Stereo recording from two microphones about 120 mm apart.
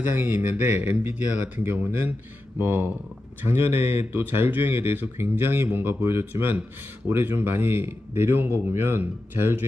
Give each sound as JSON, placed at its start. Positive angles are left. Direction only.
{"t": 0.0, "sound": "speech", "side_deg": -15}